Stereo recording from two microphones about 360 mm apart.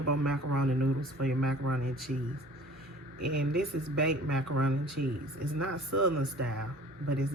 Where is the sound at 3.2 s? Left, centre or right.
Right.